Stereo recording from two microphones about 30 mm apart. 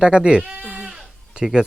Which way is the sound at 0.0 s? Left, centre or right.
Right.